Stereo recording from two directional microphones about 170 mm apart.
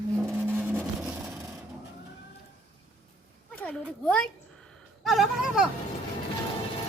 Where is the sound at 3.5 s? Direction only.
5° left (ahead or behind).